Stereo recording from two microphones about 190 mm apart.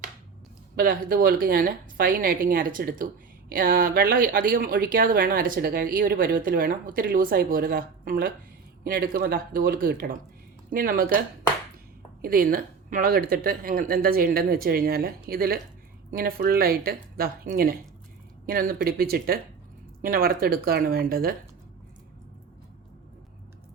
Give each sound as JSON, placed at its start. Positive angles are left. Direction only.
{"t": 0.8, "sound": "speech", "side_deg": -50}
{"t": 12.2, "sound": "speech", "side_deg": -50}